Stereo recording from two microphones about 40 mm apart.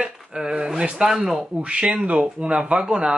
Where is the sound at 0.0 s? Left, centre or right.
Centre.